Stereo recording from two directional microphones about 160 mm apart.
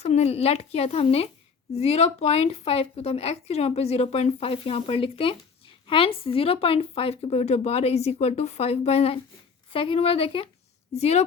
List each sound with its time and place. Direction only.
0.0 s speech: 40° left (ahead or behind)